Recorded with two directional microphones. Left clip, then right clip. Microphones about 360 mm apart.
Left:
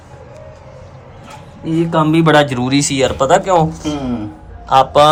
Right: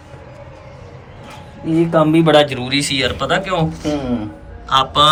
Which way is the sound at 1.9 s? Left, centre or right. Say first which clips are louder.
Left 1 dB; left.